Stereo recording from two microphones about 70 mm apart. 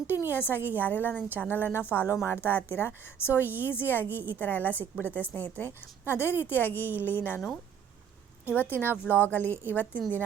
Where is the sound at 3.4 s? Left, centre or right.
Right.